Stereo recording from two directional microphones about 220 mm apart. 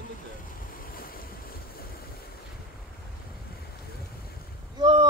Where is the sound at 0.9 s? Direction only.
40° left (ahead or behind).